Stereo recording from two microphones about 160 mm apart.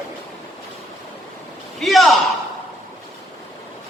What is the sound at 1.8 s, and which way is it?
Speech, centre (ahead or behind).